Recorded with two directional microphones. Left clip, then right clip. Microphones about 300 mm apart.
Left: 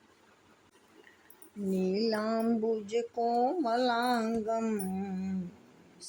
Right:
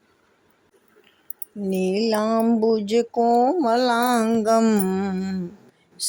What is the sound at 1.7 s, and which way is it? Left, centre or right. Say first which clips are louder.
Mantra: right 9 dB; centre.